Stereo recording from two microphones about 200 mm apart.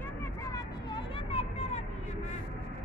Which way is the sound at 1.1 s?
30° left (ahead or behind).